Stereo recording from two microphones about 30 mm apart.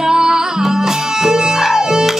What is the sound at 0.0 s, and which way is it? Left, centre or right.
Music, centre.